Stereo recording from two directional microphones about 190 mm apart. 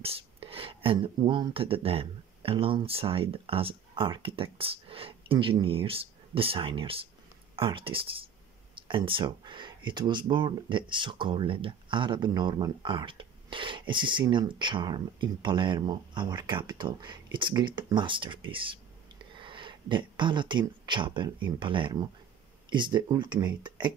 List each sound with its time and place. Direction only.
0.0 s speech: 30° right (ahead or behind)